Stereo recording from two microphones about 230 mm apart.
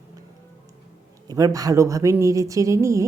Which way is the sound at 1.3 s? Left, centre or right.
Centre.